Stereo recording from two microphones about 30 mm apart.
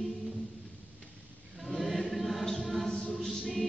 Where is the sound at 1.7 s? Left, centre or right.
Centre.